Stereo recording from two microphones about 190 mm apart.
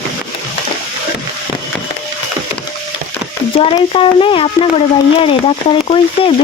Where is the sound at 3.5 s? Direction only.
30° left (ahead or behind).